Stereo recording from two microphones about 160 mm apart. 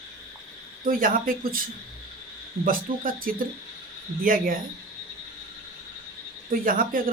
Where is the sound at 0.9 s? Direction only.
60° right (ahead or behind).